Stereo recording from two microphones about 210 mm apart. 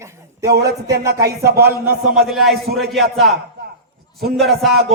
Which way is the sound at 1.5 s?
50° right (ahead or behind).